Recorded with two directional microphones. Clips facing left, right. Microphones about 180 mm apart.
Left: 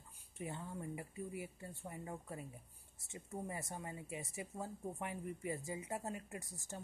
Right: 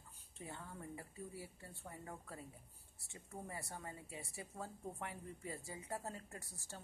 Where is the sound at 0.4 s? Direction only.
15° left (ahead or behind).